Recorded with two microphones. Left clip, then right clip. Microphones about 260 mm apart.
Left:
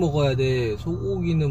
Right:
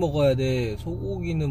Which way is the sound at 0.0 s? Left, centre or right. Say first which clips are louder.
Even; right.